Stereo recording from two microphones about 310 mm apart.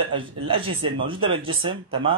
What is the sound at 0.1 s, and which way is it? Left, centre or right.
Speech, centre.